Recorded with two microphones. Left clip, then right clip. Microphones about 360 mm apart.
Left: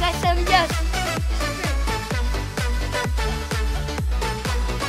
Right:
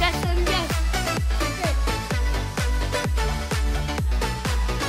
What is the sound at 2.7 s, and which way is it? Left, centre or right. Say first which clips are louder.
Music: even; centre.